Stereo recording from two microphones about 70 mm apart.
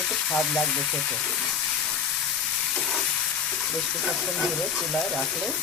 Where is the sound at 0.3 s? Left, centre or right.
Centre.